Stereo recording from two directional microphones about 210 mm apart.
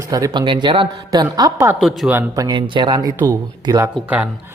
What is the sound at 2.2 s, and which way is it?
Speech, 15° right (ahead or behind).